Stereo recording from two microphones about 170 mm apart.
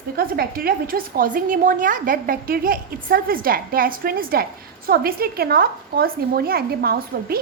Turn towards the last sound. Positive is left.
turn(degrees=-65)  # may be behind; listen again after turning